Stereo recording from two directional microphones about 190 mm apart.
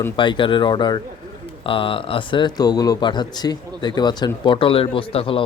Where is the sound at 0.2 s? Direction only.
25° left (ahead or behind).